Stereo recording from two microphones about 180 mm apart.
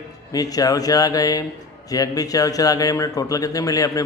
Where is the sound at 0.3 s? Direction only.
20° left (ahead or behind).